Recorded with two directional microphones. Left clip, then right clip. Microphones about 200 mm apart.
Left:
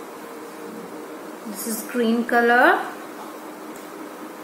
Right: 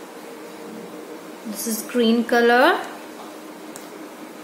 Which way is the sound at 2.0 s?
20° right (ahead or behind).